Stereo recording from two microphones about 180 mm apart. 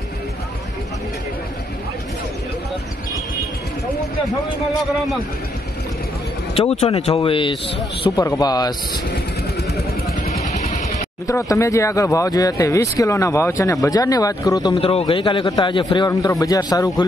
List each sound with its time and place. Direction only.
6.5 s a man's voice: 35° left (ahead or behind)
10.1 s music: 40° left (ahead or behind)
11.2 s speech: 15° left (ahead or behind)
14.8 s a man's voice: 30° left (ahead or behind)